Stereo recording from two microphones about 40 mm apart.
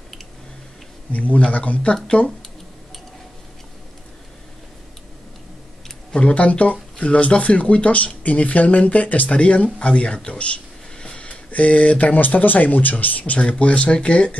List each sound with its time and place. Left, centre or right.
1.1 s speech: left
6.1 s speech: left
13.3 s speech: left